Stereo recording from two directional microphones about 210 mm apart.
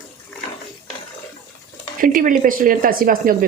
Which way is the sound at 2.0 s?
40° right (ahead or behind).